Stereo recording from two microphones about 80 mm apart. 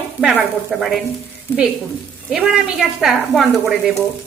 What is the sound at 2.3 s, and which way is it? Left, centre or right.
Speech, centre.